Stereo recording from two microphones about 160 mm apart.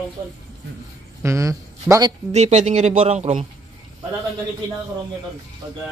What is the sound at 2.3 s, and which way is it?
Speech, 45° right (ahead or behind).